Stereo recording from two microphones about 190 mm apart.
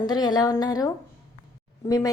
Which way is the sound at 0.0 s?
20° left (ahead or behind).